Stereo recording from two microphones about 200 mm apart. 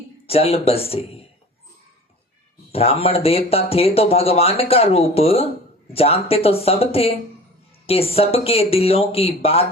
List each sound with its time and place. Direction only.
0.3 s speech: 30° left (ahead or behind)
2.7 s speech: 30° left (ahead or behind)